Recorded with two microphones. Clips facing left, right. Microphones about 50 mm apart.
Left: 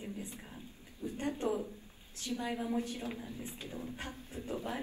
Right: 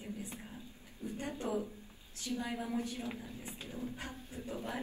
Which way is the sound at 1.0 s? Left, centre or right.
Left.